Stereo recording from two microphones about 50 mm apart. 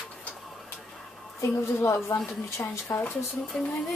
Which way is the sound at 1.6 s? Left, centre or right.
Left.